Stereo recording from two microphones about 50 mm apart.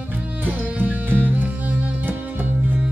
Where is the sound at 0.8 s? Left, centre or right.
Right.